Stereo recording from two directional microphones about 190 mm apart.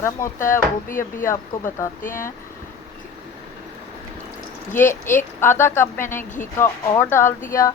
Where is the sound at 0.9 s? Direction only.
45° left (ahead or behind).